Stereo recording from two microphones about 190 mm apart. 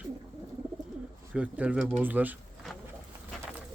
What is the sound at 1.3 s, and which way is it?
Speech, 5° right (ahead or behind).